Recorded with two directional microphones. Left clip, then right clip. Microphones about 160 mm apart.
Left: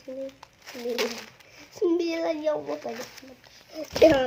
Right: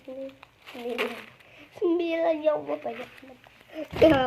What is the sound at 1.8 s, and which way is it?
Speech, 20° left (ahead or behind).